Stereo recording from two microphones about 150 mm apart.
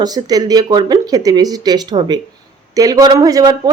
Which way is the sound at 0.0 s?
25° right (ahead or behind).